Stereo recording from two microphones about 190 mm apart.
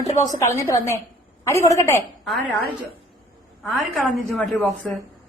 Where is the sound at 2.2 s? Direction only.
5° left (ahead or behind).